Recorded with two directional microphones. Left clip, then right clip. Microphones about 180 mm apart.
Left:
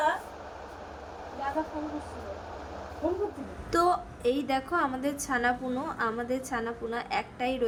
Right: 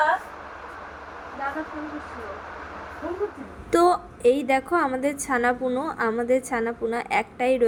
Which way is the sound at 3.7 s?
20° right (ahead or behind).